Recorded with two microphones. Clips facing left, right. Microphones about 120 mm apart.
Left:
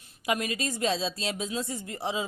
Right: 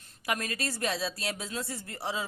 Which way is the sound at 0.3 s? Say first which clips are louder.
Left 4 dB; 20° left (ahead or behind).